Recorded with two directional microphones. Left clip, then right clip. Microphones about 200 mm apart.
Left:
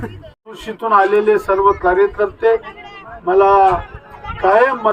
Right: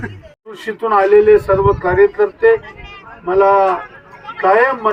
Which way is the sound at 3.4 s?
50° left (ahead or behind).